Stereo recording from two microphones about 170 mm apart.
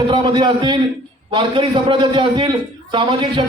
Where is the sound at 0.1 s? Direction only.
30° right (ahead or behind).